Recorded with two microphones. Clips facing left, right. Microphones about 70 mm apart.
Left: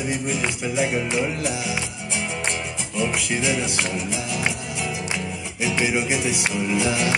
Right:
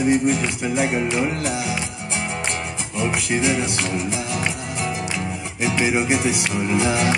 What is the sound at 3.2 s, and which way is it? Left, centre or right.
Music, right.